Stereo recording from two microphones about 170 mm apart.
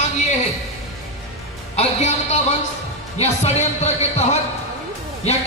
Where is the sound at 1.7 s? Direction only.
40° left (ahead or behind).